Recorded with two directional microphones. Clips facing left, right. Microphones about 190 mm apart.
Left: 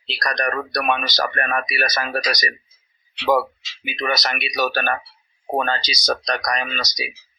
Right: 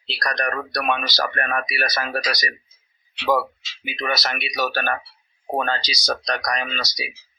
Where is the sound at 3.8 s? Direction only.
20° left (ahead or behind).